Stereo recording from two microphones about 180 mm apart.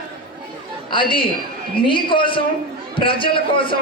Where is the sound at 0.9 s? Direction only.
30° left (ahead or behind).